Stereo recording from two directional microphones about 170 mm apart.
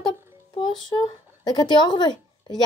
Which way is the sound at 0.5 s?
25° left (ahead or behind).